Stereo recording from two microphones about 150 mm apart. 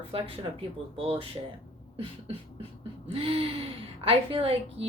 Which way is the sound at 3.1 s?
40° right (ahead or behind).